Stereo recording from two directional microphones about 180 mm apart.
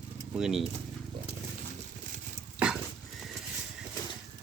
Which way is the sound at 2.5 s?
5° right (ahead or behind).